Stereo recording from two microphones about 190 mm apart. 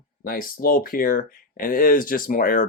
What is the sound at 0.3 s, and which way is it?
Speech, 50° left (ahead or behind).